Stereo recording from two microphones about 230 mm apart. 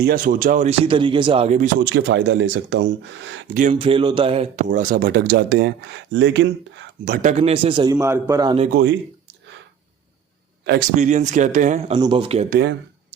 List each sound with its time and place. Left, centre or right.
0.0 s speech: right
1.9 s speech: right
3.5 s speech: right
3.8 s speech: right
7.0 s speech: right
7.9 s a man's voice: centre
10.7 s speech: right
11.9 s speech: right